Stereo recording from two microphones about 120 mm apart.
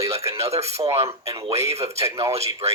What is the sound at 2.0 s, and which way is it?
Speech, 25° right (ahead or behind).